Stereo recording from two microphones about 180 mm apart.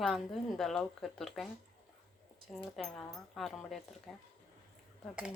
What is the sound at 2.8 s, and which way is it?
Speech, centre (ahead or behind).